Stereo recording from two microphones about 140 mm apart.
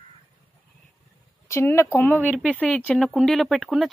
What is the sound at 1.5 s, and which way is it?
A woman's voice, 20° left (ahead or behind).